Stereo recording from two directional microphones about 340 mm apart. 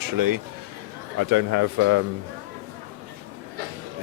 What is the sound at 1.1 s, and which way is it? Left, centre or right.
Speech, right.